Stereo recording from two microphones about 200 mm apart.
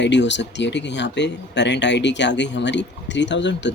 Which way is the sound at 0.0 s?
60° left (ahead or behind).